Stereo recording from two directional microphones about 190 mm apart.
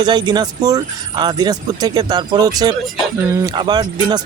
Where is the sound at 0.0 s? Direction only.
20° right (ahead or behind).